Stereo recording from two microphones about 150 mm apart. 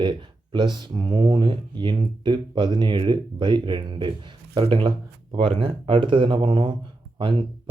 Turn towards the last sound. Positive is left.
turn(degrees=-35)  # may be behind; listen again after turning